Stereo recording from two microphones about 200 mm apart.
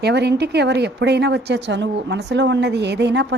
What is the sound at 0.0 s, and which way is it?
A woman's voice, 55° right (ahead or behind).